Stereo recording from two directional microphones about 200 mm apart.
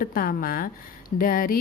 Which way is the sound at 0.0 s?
45° left (ahead or behind).